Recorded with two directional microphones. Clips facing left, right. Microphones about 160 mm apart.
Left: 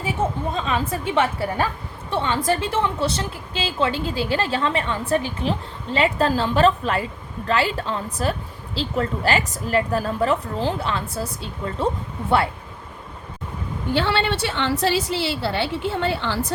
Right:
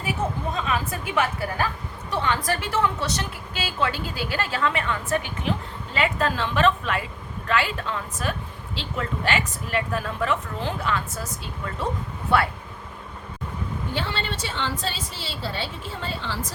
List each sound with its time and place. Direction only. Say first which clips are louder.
0.0 s a woman's voice: left 3 dB; 25° left (ahead or behind)
13.9 s a woman's voice: left 10 dB; 75° left (ahead or behind)